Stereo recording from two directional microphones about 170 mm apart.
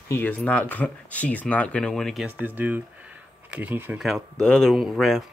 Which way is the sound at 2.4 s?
10° right (ahead or behind).